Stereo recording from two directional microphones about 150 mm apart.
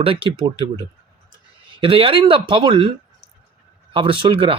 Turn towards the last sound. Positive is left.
turn(degrees=-35)  # may be behind; listen again after turning